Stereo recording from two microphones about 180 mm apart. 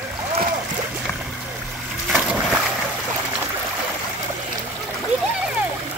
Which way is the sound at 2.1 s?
5° right (ahead or behind).